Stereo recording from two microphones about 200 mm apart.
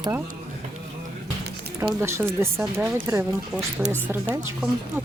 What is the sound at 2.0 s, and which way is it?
Speech, 15° right (ahead or behind).